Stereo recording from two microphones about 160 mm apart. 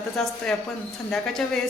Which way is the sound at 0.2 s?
Centre (ahead or behind).